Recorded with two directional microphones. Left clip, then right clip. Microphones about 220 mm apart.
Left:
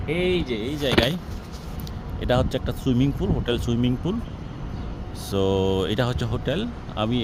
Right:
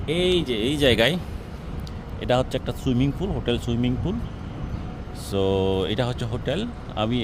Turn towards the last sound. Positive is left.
turn(degrees=0)  # may be behind; listen again after turning